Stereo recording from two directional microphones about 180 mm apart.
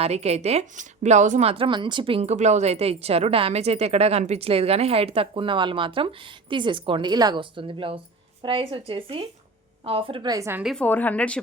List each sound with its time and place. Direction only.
0.0 s a woman's voice: 35° right (ahead or behind); by 10.6 s 15° right (ahead or behind)
10.6 s a woman's voice: centre (ahead or behind)